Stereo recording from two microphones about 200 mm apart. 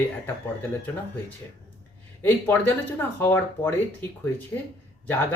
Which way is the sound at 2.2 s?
10° left (ahead or behind).